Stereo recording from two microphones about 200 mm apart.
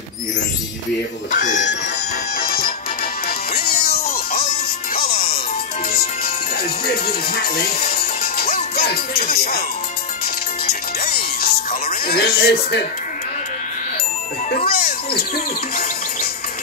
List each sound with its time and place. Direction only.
1.3 s speech: 40° left (ahead or behind)
3.5 s music: 50° left (ahead or behind)
14.5 s speech: 50° left (ahead or behind)